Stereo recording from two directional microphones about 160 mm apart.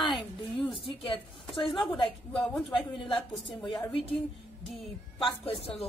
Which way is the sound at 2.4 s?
10° left (ahead or behind).